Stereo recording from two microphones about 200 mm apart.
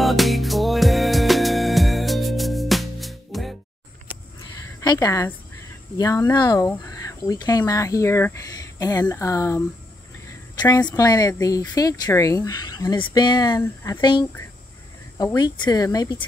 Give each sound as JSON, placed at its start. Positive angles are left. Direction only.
{"t": 0.0, "sound": "music", "side_deg": 0}
{"t": 4.8, "sound": "speech", "side_deg": 15}